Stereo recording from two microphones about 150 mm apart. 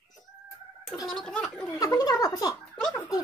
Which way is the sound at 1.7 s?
25° left (ahead or behind).